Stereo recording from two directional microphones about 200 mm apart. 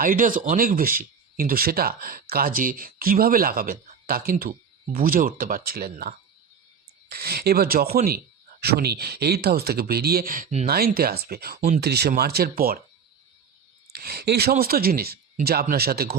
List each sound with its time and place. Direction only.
0.0 s speech: 40° right (ahead or behind)
13.9 s speech: 50° right (ahead or behind)